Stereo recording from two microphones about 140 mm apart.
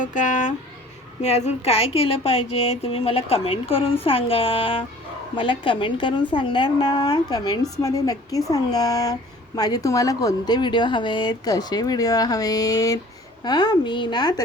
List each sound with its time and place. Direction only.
0.0 s a woman's voice: 65° left (ahead or behind); by 14.4 s 30° left (ahead or behind)